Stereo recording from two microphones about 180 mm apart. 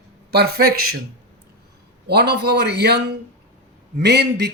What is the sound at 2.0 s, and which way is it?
A man's voice, 65° right (ahead or behind).